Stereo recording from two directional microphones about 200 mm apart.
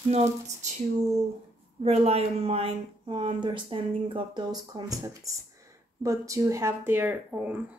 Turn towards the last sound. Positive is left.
turn(degrees=-10)  # may be behind; listen again after turning